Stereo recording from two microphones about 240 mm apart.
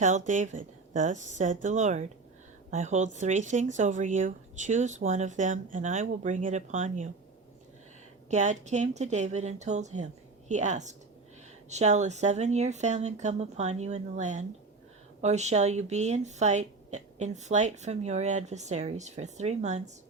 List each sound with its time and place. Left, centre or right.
0.0 s a woman's voice: right
8.3 s a woman's voice: right